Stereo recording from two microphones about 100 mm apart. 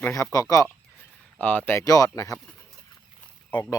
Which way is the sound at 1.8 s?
35° left (ahead or behind).